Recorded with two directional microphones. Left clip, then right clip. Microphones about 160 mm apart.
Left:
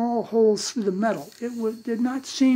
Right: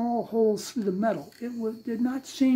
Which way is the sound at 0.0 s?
30° left (ahead or behind).